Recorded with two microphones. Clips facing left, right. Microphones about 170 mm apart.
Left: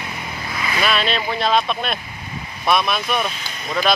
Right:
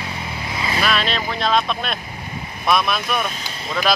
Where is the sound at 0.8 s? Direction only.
Centre (ahead or behind).